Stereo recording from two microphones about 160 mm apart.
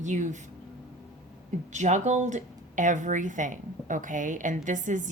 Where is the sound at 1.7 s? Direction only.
50° right (ahead or behind).